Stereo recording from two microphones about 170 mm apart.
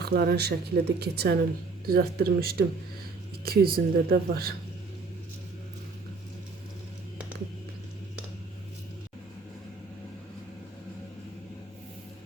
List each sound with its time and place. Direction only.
0.0 s speech: 70° right (ahead or behind)